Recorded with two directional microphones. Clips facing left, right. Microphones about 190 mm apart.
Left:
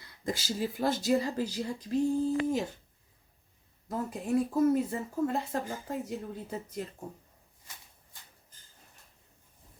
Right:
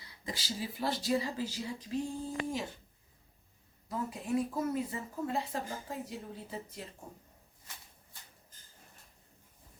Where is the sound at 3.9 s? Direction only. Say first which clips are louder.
Left 4 dB; 50° left (ahead or behind).